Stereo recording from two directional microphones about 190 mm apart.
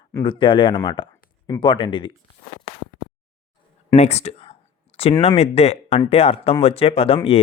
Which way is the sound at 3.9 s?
35° left (ahead or behind).